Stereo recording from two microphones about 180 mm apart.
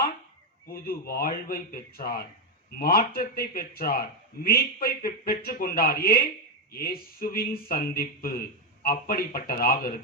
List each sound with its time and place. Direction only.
0.7 s a man's voice: 55° left (ahead or behind)